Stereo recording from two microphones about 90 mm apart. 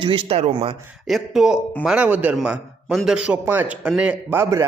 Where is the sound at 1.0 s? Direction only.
5° right (ahead or behind).